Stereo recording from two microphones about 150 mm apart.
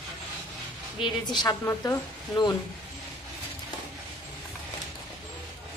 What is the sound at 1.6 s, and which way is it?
Speech, 20° left (ahead or behind).